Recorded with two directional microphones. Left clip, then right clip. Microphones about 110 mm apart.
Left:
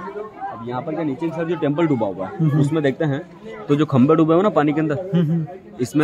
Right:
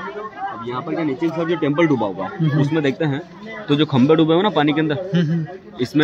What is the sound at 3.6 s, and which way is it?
A man's voice, 55° left (ahead or behind).